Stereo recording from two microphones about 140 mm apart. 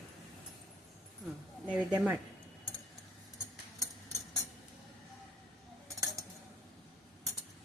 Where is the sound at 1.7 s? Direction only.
10° right (ahead or behind).